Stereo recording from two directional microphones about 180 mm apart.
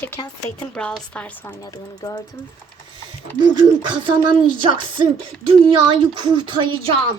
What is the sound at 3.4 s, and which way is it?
Speech, 25° right (ahead or behind).